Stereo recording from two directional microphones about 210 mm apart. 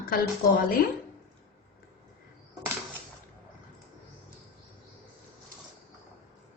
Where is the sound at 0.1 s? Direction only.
45° left (ahead or behind).